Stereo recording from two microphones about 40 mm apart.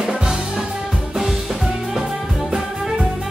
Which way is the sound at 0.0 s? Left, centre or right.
Centre.